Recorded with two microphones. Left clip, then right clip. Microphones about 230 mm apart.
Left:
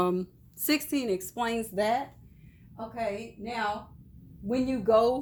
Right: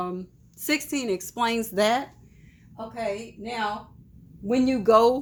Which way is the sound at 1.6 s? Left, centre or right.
Right.